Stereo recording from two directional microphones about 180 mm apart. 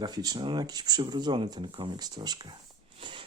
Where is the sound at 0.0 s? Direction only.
20° right (ahead or behind).